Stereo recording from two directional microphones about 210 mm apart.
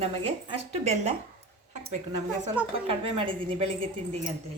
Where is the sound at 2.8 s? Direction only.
25° right (ahead or behind).